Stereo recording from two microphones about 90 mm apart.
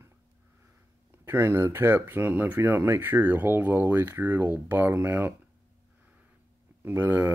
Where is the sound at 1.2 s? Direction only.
25° right (ahead or behind).